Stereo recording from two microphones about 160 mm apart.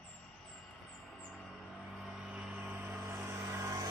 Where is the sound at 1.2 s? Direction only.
Centre (ahead or behind); by 3.8 s 15° right (ahead or behind).